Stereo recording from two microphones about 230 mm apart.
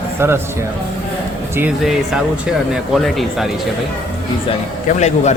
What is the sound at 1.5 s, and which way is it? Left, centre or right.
Speech, centre.